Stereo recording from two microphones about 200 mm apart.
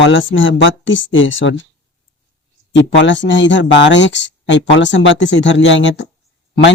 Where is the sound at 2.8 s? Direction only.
65° left (ahead or behind).